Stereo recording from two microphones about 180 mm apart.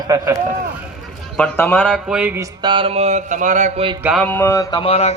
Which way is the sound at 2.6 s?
30° right (ahead or behind).